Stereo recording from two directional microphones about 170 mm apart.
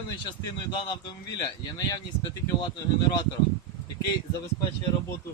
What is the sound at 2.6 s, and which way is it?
Speech, 25° left (ahead or behind).